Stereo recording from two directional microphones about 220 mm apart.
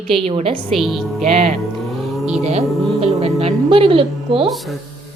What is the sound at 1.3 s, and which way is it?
Speech, 30° right (ahead or behind).